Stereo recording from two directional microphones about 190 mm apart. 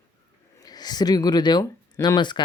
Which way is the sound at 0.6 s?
20° left (ahead or behind).